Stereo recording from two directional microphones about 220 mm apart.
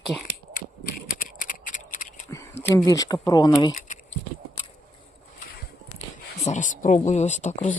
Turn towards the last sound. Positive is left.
turn(degrees=35)  # may be behind; listen again after turning